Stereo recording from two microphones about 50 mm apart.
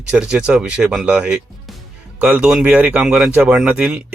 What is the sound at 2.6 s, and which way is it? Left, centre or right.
Speech, right.